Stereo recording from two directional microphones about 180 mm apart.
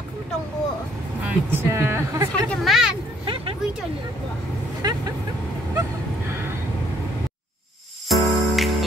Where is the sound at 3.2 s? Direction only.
30° right (ahead or behind).